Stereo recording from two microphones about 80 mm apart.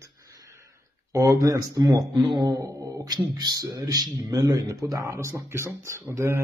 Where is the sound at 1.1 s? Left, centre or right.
Right.